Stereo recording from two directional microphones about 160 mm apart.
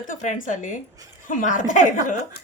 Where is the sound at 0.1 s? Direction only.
55° left (ahead or behind).